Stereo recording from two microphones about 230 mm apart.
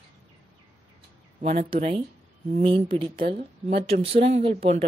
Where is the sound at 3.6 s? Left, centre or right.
Right.